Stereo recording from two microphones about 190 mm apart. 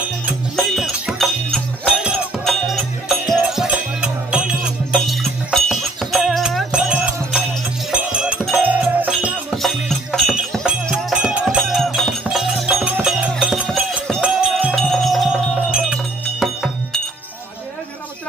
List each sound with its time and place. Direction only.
0.6 s music: centre (ahead or behind)